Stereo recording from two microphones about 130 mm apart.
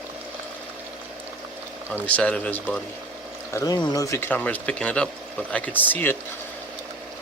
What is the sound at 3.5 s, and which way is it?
Speech, 30° left (ahead or behind).